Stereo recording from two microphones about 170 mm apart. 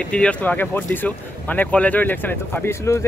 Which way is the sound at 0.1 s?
5° left (ahead or behind).